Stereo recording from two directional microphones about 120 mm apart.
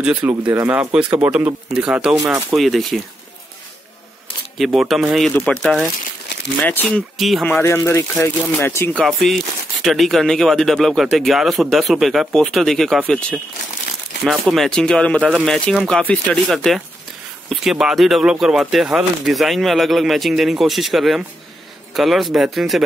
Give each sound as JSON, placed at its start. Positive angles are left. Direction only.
{"t": 0.0, "sound": "speech", "side_deg": -10}
{"t": 4.6, "sound": "speech", "side_deg": 0}
{"t": 6.6, "sound": "speech", "side_deg": 15}
{"t": 7.2, "sound": "speech", "side_deg": 0}
{"t": 7.4, "sound": "speech", "side_deg": 15}
{"t": 9.0, "sound": "speech", "side_deg": 0}